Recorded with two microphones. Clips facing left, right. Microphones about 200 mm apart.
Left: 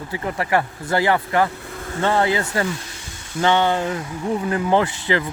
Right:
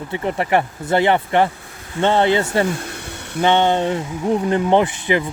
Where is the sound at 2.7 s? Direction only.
60° right (ahead or behind).